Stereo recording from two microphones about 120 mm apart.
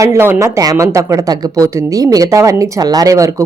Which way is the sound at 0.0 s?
20° right (ahead or behind).